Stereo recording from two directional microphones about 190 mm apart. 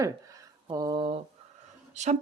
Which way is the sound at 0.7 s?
20° right (ahead or behind).